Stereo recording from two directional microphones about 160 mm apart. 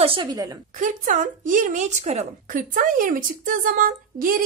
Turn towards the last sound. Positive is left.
turn(degrees=-60)  # may be behind; listen again after turning